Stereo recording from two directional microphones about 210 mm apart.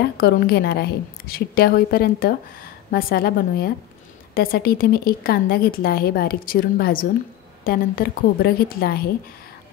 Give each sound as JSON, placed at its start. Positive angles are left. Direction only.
{"t": 0.0, "sound": "a woman's voice", "side_deg": 50}